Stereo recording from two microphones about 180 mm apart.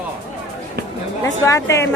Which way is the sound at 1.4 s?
15° left (ahead or behind).